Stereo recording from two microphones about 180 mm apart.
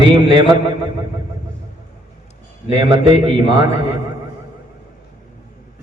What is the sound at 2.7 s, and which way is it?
A man's voice, 25° right (ahead or behind).